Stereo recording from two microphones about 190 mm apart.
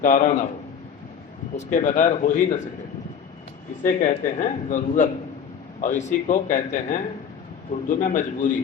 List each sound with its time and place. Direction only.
0.0 s speech: 40° left (ahead or behind)
1.5 s speech: 40° left (ahead or behind)
4.1 s speech: 40° left (ahead or behind)